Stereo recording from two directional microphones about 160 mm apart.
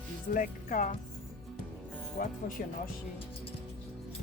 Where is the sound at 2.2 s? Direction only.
70° left (ahead or behind).